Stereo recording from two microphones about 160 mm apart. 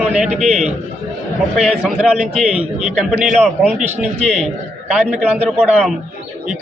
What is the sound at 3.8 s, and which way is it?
Speech, 45° right (ahead or behind).